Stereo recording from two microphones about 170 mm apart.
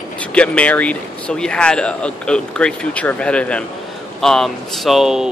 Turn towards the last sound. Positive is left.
turn(degrees=0)  # may be behind; listen again after turning